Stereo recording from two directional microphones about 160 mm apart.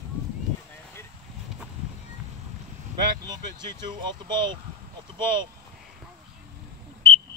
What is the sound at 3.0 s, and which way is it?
Speech, 25° right (ahead or behind).